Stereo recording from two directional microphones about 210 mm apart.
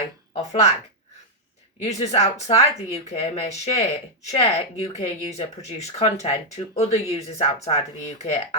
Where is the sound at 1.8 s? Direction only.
30° left (ahead or behind).